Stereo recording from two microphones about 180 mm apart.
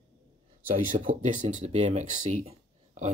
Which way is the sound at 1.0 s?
40° right (ahead or behind).